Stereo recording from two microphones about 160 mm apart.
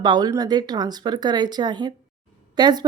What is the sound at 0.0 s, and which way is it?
Speech, 25° right (ahead or behind).